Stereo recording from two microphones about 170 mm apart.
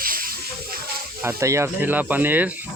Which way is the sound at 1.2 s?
15° right (ahead or behind).